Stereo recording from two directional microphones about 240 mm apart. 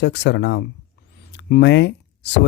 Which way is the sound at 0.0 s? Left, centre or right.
Left.